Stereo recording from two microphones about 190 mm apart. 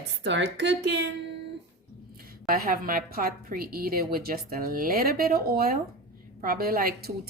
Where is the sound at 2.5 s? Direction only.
50° right (ahead or behind).